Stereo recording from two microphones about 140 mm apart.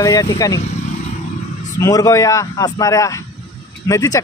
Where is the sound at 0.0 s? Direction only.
25° left (ahead or behind).